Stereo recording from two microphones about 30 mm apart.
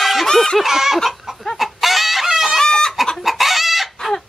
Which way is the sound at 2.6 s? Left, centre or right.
Left.